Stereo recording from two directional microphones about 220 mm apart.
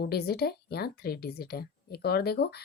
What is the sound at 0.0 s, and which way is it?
A woman's voice, 45° left (ahead or behind).